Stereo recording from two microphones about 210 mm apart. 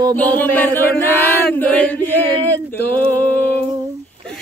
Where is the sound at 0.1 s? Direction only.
5° left (ahead or behind).